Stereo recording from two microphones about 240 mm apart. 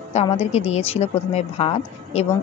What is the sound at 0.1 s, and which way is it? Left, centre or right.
A woman's voice, left.